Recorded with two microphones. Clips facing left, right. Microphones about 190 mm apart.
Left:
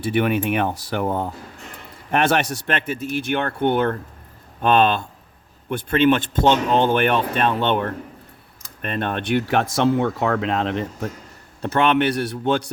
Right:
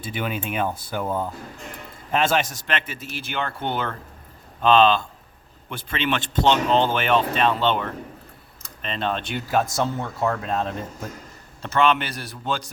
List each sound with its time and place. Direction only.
0.0 s speech: 65° left (ahead or behind)
11.6 s speech: 60° left (ahead or behind)